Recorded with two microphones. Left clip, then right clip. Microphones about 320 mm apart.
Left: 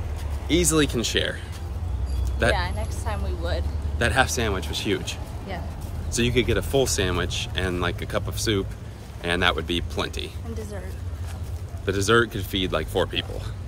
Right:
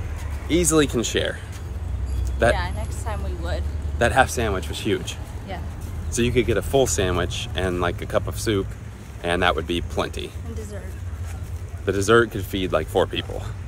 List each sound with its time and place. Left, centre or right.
0.5 s speech: centre
2.5 s speech: centre
4.0 s speech: centre
6.1 s speech: centre
11.8 s speech: centre